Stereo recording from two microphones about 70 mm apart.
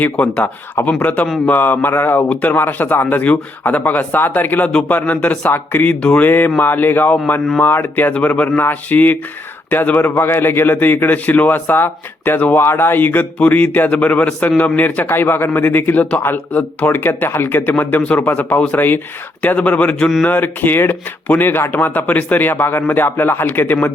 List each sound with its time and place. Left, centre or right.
0.0 s a man's voice: left
6.2 s a man's voice: left